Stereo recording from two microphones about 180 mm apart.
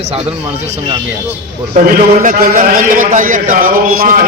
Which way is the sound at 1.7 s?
50° right (ahead or behind).